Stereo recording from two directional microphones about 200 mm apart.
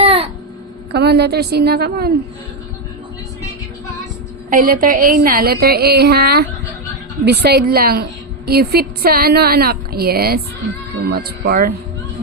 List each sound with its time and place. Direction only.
0.0 s a sound: 30° right (ahead or behind)
0.9 s a woman's voice: 55° right (ahead or behind)
4.4 s a woman's voice: 45° right (ahead or behind)